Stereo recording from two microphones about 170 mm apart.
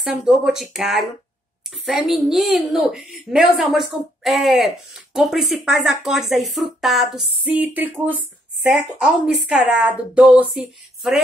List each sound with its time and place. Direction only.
0.0 s speech: 5° right (ahead or behind)